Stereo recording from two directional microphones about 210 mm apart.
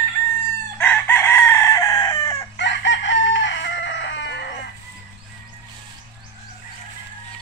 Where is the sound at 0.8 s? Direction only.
10° left (ahead or behind).